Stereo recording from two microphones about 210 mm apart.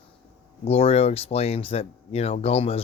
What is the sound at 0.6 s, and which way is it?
Speech, 30° left (ahead or behind).